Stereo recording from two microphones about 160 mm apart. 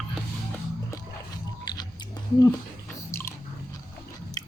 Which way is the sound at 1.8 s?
25° left (ahead or behind).